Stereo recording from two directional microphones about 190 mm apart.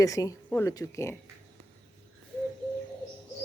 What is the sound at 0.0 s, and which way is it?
Speech, 20° left (ahead or behind).